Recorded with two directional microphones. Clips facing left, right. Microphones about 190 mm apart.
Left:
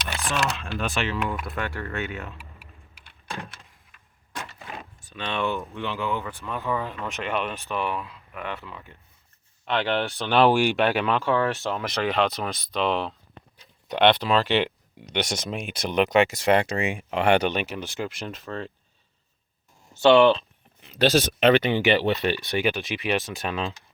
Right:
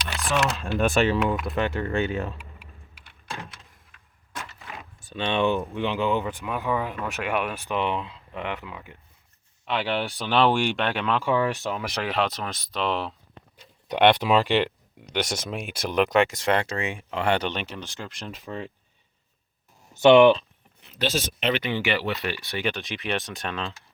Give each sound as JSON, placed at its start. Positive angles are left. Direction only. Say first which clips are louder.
{"t": 0.8, "sound": "speech", "louder": "right 8 dB", "side_deg": -45}
{"t": 1.5, "sound": "speech", "louder": "right 6 dB", "side_deg": -20}
{"t": 5.0, "sound": "speech", "louder": "right 4 dB", "side_deg": -25}
{"t": 10.3, "sound": "speech", "louder": "left 3 dB", "side_deg": 5}
{"t": 11.2, "sound": "speech", "louder": "even", "side_deg": -10}
{"t": 11.6, "sound": "speech", "louder": "left 2 dB", "side_deg": 0}
{"t": 18.3, "sound": "speech", "louder": "left 1 dB", "side_deg": -15}
{"t": 19.9, "sound": "speech", "louder": "right 2 dB", "side_deg": -15}
{"t": 21.0, "sound": "speech", "louder": "left 7 dB", "side_deg": 70}
{"t": 21.6, "sound": "speech", "louder": "left 5 dB", "side_deg": 20}
{"t": 22.6, "sound": "speech", "louder": "left 3 dB", "side_deg": 5}